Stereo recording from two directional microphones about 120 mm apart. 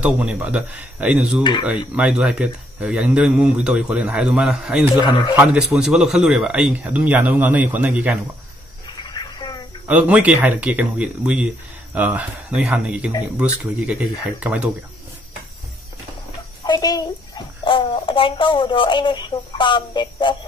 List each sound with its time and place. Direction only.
0.0 s speech: 10° right (ahead or behind)
1.4 s a man's voice: 40° left (ahead or behind)
2.0 s speech: 10° right (ahead or behind)
4.9 s a man's voice: 40° left (ahead or behind)
5.3 s speech: 10° right (ahead or behind)
8.8 s a sound: 35° left (ahead or behind)
9.8 s speech: 10° right (ahead or behind)
14.4 s speech: 10° right (ahead or behind)
16.6 s a sound: 30° left (ahead or behind)
17.6 s speech: 45° left (ahead or behind)